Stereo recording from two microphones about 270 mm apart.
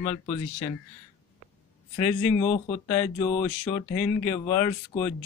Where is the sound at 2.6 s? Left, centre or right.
Centre.